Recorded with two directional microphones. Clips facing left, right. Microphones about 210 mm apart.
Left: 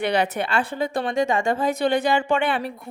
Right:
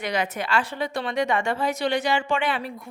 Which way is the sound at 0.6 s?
55° left (ahead or behind).